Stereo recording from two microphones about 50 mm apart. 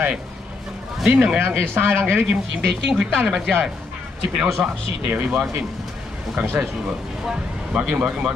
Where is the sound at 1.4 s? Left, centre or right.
Right.